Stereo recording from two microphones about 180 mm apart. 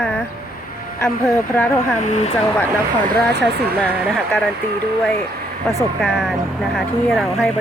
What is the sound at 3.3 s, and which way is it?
Speech, 70° right (ahead or behind).